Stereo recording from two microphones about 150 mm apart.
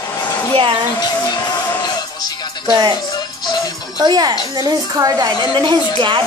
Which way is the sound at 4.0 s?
25° right (ahead or behind).